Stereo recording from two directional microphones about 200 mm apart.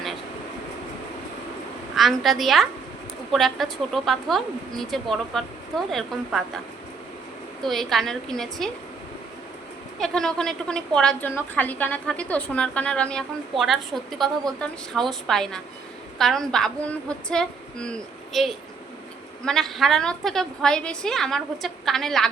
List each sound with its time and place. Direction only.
2.0 s a woman's voice: centre (ahead or behind)
7.6 s a woman's voice: centre (ahead or behind)
10.0 s a woman's voice: 5° left (ahead or behind)